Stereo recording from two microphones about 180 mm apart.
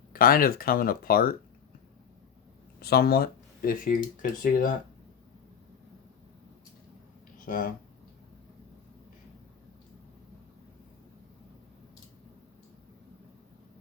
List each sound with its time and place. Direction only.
0.1 s speech: 55° left (ahead or behind)
2.8 s speech: 60° left (ahead or behind)
7.4 s speech: 50° left (ahead or behind)